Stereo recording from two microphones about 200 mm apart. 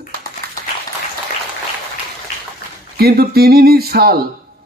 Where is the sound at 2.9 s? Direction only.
50° right (ahead or behind).